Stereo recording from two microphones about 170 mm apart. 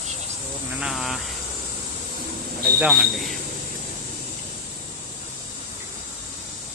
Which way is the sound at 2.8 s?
Centre (ahead or behind).